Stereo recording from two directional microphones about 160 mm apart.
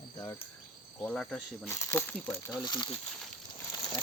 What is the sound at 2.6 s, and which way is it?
Speech, 30° left (ahead or behind).